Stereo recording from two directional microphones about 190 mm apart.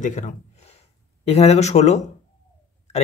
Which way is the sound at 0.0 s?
40° left (ahead or behind).